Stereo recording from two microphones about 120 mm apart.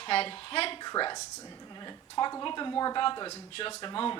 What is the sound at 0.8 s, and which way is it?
A woman's voice, 35° left (ahead or behind).